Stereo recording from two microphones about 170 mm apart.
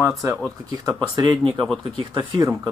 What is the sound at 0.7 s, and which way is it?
Speech, 20° right (ahead or behind).